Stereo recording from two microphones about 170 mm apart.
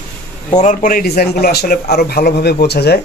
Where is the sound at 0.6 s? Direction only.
50° left (ahead or behind).